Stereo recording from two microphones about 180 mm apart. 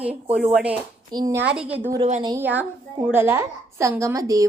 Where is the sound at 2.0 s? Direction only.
30° right (ahead or behind).